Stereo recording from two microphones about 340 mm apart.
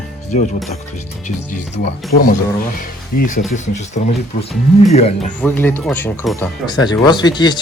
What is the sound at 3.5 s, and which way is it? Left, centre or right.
Speech, left.